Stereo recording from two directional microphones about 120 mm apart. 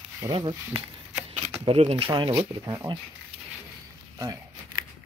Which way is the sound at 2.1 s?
35° right (ahead or behind).